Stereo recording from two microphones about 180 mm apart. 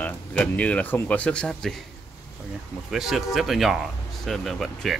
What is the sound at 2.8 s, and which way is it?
Speech, centre (ahead or behind).